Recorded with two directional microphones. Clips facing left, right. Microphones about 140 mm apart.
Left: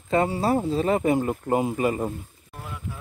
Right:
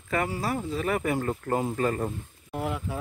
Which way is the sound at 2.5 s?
85° right.